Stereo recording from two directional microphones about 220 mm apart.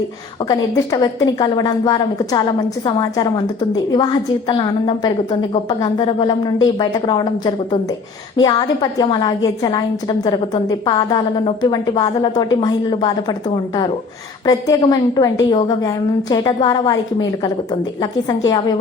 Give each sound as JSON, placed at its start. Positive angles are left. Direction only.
{"t": 0.4, "sound": "a woman's voice", "side_deg": 15}
{"t": 14.4, "sound": "a woman's voice", "side_deg": 15}